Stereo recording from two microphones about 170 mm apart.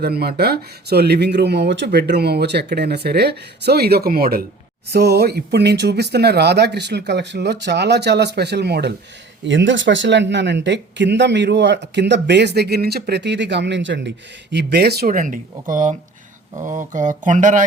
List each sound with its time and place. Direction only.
0.0 s speech: 65° right (ahead or behind)
4.9 s speech: 70° right (ahead or behind)
9.5 s speech: 90° right
14.5 s speech: 75° right (ahead or behind); by 17.6 s 45° right (ahead or behind)